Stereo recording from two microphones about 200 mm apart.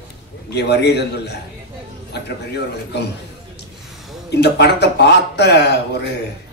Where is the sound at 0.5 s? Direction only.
55° left (ahead or behind).